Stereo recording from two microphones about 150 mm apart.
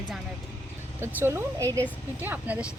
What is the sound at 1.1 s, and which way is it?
A woman's voice, 15° right (ahead or behind).